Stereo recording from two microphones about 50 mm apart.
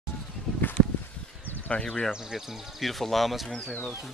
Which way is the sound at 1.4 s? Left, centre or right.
Left.